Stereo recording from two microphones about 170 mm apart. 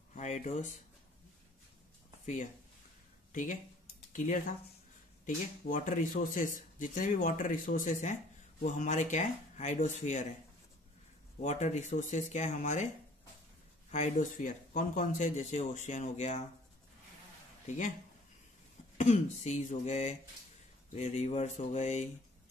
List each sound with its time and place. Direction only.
0.1 s a sound: 45° left (ahead or behind)
4.1 s speech: 50° left (ahead or behind)
11.4 s speech: 45° left (ahead or behind)
13.9 s speech: 45° left (ahead or behind)
17.6 s speech: 50° left (ahead or behind)
18.9 s speech: 45° left (ahead or behind)